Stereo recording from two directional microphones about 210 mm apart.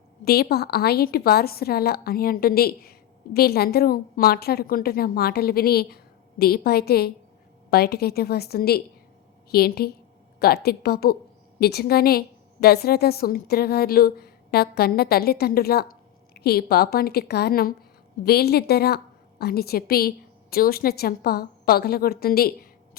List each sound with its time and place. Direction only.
0.3 s a woman's voice: 50° left (ahead or behind)